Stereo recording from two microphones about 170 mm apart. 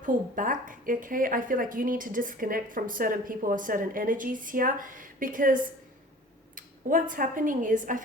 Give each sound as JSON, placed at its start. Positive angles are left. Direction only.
{"t": 0.0, "sound": "a woman's voice", "side_deg": -50}